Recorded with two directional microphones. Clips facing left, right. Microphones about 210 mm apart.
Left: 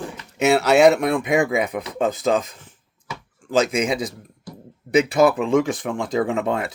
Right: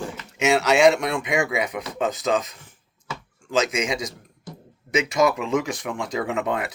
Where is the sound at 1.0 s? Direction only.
55° left (ahead or behind).